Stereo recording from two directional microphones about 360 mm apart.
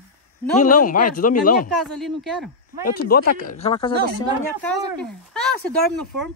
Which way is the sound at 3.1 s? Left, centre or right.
Left.